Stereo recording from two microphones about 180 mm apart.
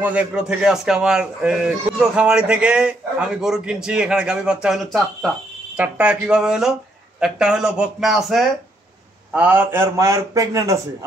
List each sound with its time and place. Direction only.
0.0 s a man's voice: 10° right (ahead or behind)